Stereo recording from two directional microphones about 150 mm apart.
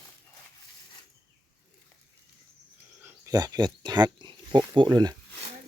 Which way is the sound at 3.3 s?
25° right (ahead or behind).